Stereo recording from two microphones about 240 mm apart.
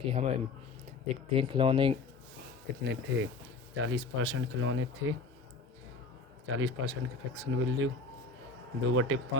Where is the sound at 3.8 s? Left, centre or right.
Right.